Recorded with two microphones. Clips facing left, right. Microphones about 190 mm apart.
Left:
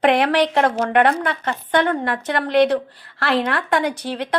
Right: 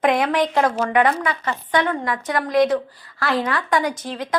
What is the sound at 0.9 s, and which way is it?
A woman's voice, 65° left (ahead or behind).